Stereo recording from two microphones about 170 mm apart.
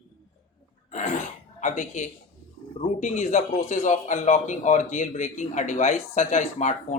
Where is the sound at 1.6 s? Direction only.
45° left (ahead or behind).